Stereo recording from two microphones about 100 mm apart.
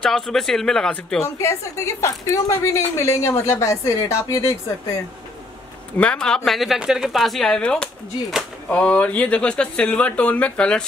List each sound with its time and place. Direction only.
0.0 s a woman's voice: 5° left (ahead or behind)
1.4 s a woman's voice: 30° left (ahead or behind)
5.9 s a woman's voice: 10° left (ahead or behind)